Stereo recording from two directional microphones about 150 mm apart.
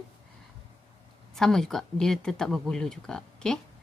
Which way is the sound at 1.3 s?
5° left (ahead or behind).